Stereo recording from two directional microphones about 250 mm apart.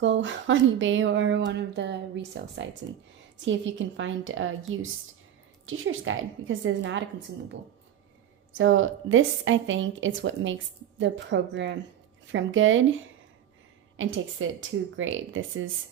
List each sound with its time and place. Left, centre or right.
0.0 s a woman's voice: right
8.5 s a woman's voice: right